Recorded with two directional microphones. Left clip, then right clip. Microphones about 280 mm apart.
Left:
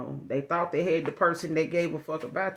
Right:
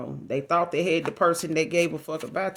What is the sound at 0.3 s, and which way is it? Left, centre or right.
Speech, right.